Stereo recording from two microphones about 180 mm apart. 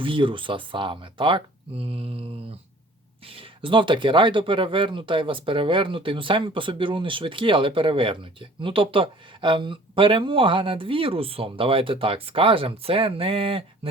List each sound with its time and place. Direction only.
0.0 s speech: 30° right (ahead or behind)